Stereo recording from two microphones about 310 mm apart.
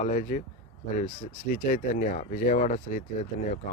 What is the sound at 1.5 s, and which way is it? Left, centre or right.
Speech, left.